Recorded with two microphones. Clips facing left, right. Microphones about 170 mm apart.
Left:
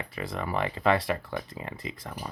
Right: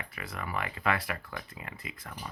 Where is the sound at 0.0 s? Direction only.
30° left (ahead or behind).